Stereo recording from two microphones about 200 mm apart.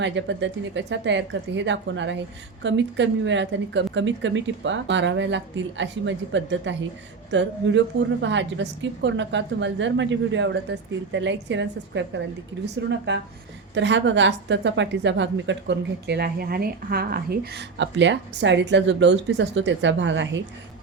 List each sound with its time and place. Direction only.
0.0 s a woman's voice: 65° right (ahead or behind)